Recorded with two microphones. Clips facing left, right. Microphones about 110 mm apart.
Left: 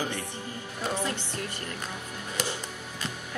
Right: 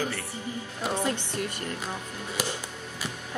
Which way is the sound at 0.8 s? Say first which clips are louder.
Right 2 dB; 15° right (ahead or behind).